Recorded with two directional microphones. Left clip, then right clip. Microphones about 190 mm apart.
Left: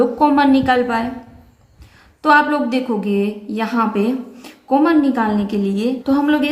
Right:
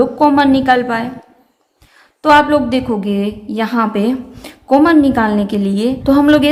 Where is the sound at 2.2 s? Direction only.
30° right (ahead or behind).